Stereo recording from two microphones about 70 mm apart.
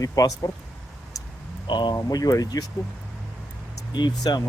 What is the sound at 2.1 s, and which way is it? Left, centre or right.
Speech, left.